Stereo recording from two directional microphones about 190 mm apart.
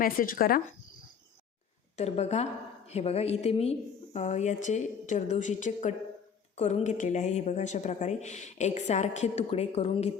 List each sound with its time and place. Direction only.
0.0 s speech: 50° left (ahead or behind)
2.0 s a woman's voice: 35° left (ahead or behind)